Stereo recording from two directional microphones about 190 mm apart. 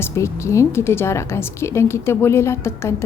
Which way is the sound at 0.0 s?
15° left (ahead or behind).